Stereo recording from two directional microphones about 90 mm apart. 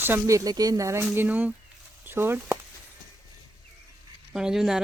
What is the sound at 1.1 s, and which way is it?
Speech, 20° right (ahead or behind).